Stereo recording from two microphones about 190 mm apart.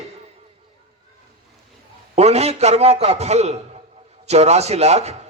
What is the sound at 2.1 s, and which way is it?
A man's voice, 35° right (ahead or behind).